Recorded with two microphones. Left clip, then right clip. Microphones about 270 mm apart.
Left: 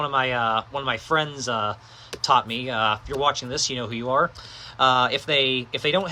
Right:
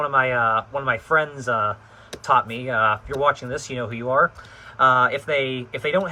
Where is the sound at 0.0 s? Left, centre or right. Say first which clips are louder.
Right 3 dB; centre.